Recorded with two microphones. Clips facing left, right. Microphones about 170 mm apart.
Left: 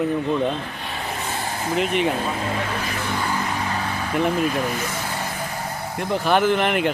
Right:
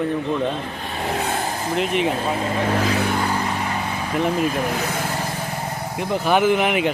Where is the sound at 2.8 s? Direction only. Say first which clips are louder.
Right 7 dB; 80° right.